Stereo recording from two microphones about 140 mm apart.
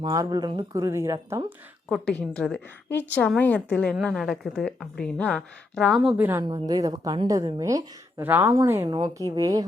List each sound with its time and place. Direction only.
0.0 s speech: 30° right (ahead or behind)
1.9 s a woman's voice: 5° left (ahead or behind)
6.1 s a woman's voice: 15° right (ahead or behind)
6.5 s a woman's voice: 25° right (ahead or behind)